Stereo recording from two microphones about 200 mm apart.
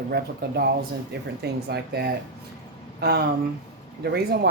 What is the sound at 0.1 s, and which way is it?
Speech, 50° right (ahead or behind).